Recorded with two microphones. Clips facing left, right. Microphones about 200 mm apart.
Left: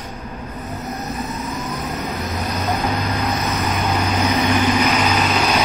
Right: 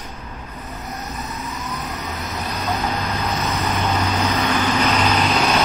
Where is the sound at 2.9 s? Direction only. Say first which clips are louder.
Left 2 dB; 15° left (ahead or behind).